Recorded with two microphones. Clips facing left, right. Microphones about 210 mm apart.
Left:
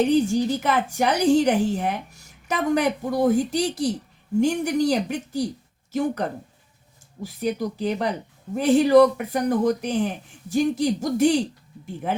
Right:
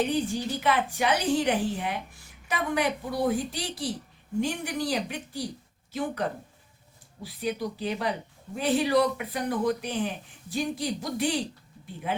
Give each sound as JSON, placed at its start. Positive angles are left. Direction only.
{"t": 0.1, "sound": "a woman's voice", "side_deg": 45}